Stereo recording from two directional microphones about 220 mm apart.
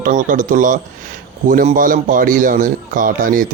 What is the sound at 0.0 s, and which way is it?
Speech, 35° right (ahead or behind).